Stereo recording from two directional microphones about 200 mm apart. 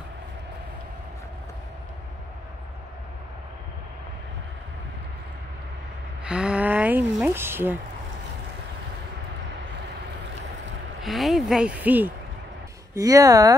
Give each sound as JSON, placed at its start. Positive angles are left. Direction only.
{"t": 6.2, "sound": "speech", "side_deg": -5}
{"t": 11.0, "sound": "speech", "side_deg": 0}